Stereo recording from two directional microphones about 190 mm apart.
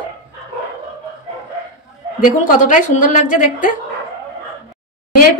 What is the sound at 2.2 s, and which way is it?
A woman's voice, 40° left (ahead or behind).